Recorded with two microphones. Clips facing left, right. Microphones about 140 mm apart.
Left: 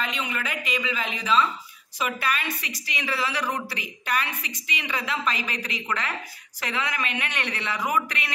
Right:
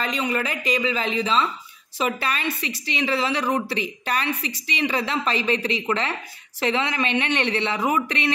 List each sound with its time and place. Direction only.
0.0 s a woman's voice: 40° right (ahead or behind)